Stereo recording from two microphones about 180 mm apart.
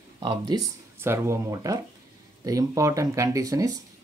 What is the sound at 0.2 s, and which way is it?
Speech, 25° right (ahead or behind).